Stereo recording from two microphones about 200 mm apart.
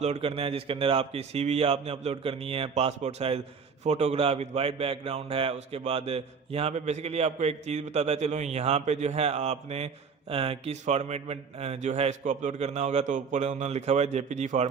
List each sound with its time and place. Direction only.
0.0 s a man's voice: 30° right (ahead or behind)